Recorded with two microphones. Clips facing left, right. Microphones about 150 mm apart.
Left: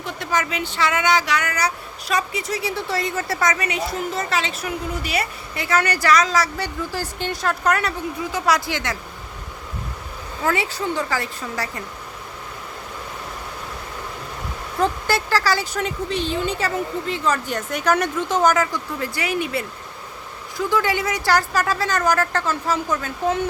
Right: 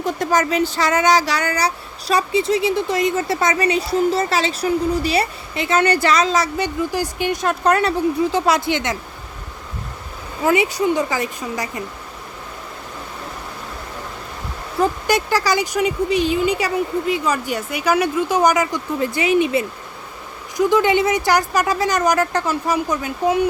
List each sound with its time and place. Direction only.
0.0 s speech: 40° right (ahead or behind); by 7.5 s 15° right (ahead or behind)
7.6 s speech: 30° right (ahead or behind)
10.4 s speech: 15° right (ahead or behind)
14.8 s speech: 15° right (ahead or behind)